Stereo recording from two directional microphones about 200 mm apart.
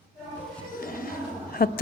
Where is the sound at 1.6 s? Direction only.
50° left (ahead or behind).